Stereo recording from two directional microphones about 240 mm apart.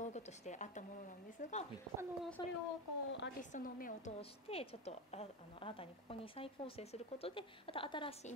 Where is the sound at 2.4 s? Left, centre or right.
Centre.